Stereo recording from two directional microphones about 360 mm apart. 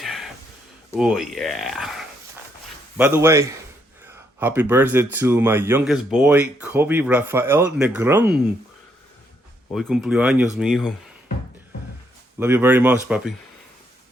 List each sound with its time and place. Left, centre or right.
0.0 s a sound: centre
0.9 s a man's voice: centre
9.7 s speech: centre
12.4 s speech: centre